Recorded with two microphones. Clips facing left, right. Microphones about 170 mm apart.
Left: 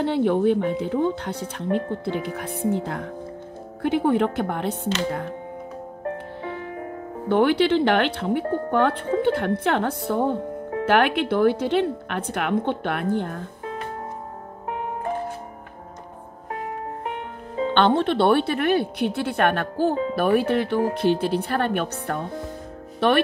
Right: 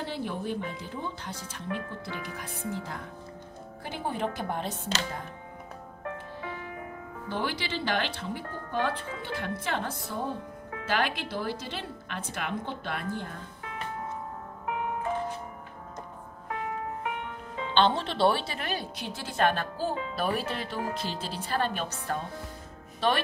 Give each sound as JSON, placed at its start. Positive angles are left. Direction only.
{"t": 0.0, "sound": "a woman's voice", "side_deg": 60}
{"t": 6.0, "sound": "music", "side_deg": 35}
{"t": 7.2, "sound": "a woman's voice", "side_deg": 60}
{"t": 14.7, "sound": "music", "side_deg": 35}
{"t": 16.5, "sound": "music", "side_deg": 35}
{"t": 17.7, "sound": "a woman's voice", "side_deg": 55}